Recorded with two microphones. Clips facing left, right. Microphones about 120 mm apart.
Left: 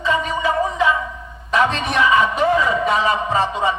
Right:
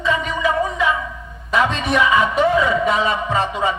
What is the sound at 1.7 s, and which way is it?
Speech, 30° left (ahead or behind).